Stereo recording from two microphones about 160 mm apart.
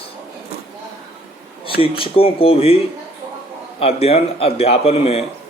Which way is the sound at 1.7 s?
35° left (ahead or behind).